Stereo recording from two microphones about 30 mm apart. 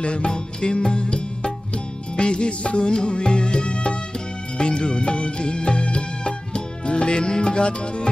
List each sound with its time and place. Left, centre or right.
0.0 s music: left